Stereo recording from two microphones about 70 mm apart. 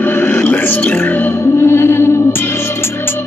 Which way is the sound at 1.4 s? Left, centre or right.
Left.